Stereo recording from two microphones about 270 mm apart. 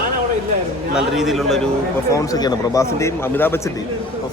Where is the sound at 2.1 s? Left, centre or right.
Centre.